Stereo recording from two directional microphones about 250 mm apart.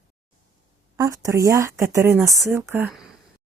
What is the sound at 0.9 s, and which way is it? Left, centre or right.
Speech, centre.